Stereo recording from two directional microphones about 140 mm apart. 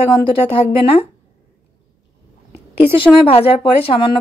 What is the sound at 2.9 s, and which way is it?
Speech, 40° left (ahead or behind).